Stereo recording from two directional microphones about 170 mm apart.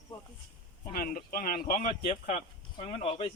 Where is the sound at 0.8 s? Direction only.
55° left (ahead or behind).